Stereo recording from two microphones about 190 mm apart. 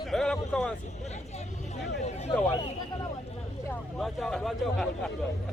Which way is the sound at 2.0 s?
35° left (ahead or behind).